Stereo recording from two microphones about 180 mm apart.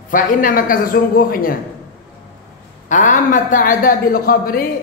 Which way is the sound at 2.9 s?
45° left (ahead or behind).